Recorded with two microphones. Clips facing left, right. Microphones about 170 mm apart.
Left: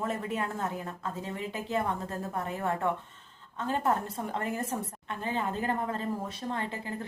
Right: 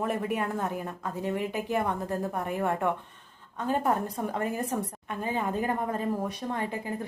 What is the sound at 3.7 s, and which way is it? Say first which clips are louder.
A woman's voice: right 2 dB; 15° right (ahead or behind).